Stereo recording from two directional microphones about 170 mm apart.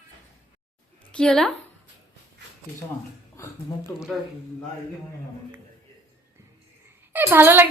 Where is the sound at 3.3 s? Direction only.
15° left (ahead or behind).